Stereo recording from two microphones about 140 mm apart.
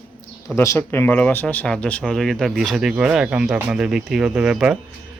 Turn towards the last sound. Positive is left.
turn(degrees=-5)  # may be behind; listen again after turning